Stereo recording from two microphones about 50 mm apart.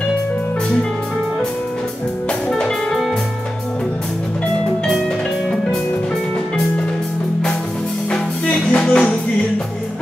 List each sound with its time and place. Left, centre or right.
2.5 s music: centre
8.5 s music: left